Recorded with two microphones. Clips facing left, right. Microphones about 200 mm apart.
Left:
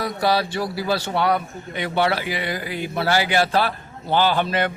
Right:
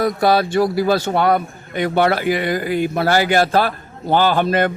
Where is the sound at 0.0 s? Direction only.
50° right (ahead or behind).